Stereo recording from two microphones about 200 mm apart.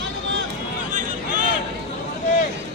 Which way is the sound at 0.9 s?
40° right (ahead or behind).